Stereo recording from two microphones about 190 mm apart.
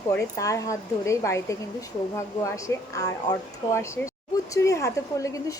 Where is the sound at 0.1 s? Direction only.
15° left (ahead or behind).